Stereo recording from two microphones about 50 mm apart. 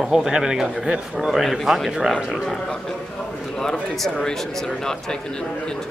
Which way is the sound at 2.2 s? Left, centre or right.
Centre.